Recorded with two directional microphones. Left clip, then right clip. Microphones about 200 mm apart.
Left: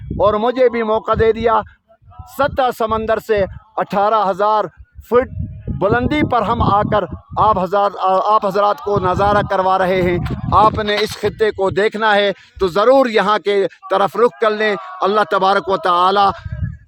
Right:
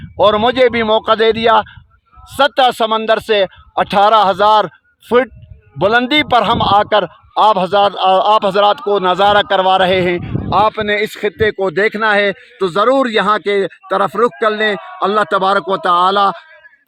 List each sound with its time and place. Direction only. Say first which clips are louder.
0.2 s a man's voice: right 3 dB; 30° right (ahead or behind)